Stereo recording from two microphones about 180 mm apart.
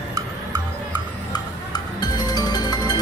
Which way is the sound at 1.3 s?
20° left (ahead or behind).